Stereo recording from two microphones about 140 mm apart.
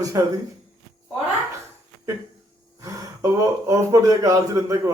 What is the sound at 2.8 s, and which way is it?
Speech, 25° right (ahead or behind).